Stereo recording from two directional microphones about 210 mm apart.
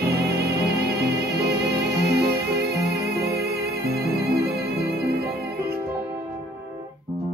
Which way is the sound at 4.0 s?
50° right (ahead or behind).